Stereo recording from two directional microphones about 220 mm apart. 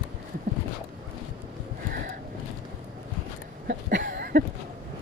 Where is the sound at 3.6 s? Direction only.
50° right (ahead or behind).